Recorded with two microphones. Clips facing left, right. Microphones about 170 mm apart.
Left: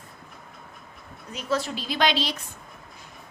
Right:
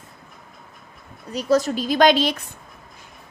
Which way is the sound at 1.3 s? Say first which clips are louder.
Right 8 dB; 40° right (ahead or behind).